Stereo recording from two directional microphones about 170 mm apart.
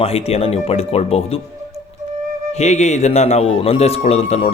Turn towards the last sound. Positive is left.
turn(degrees=35)  # may be behind; listen again after turning